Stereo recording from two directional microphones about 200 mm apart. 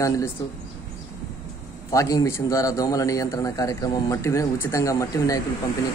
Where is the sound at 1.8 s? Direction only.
15° left (ahead or behind).